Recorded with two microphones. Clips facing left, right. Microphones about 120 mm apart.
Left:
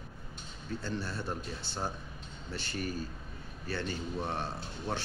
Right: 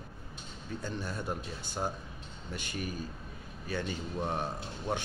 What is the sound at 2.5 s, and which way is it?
A man's voice, 15° right (ahead or behind).